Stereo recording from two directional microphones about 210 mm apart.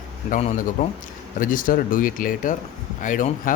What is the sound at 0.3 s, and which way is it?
Speech, 35° left (ahead or behind).